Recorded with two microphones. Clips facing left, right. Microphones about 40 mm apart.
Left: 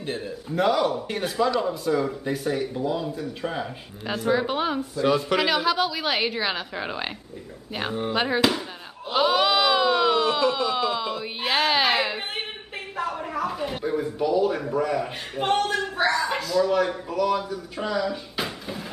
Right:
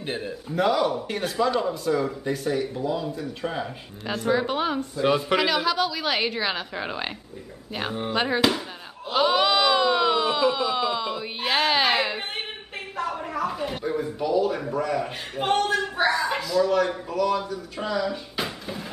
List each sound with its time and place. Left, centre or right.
0.0 s speech: right
0.5 s speech: centre
4.9 s speech: centre
5.4 s speech: centre
8.1 s speech: centre